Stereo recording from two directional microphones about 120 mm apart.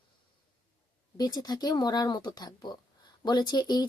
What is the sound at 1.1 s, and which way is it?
Speech, 35° left (ahead or behind).